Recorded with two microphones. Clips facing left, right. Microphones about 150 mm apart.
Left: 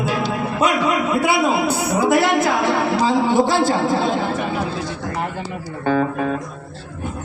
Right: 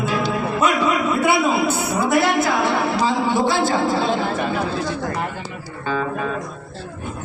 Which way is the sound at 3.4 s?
40° left (ahead or behind).